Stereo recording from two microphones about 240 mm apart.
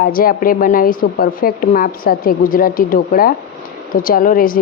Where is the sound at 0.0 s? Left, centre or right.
Left.